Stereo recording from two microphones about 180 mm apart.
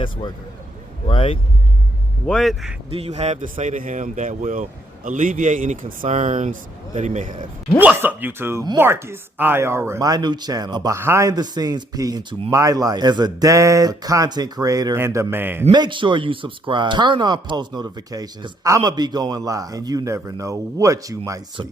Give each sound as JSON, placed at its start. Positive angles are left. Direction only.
{"t": 0.0, "sound": "a man's voice", "side_deg": 25}
{"t": 2.2, "sound": "speech", "side_deg": 0}
{"t": 2.9, "sound": "speech", "side_deg": -35}
{"t": 7.8, "sound": "speech", "side_deg": -10}
{"t": 15.7, "sound": "speech", "side_deg": -25}